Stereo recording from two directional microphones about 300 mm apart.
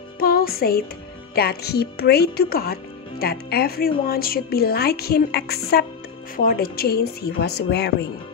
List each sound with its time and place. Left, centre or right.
0.2 s music: left
1.3 s speech: left